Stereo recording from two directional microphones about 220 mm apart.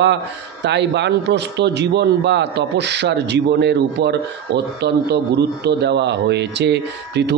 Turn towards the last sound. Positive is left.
turn(degrees=-50)  # may be behind; listen again after turning